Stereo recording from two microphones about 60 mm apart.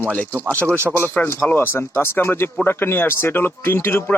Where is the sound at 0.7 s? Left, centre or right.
Right.